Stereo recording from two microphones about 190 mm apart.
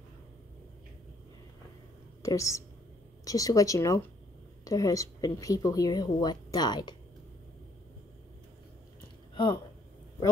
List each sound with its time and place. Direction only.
2.2 s a woman's voice: 15° left (ahead or behind)
9.3 s speech: 25° left (ahead or behind)